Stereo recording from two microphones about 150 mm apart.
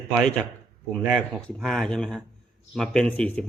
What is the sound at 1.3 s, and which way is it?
A man's voice, 5° left (ahead or behind).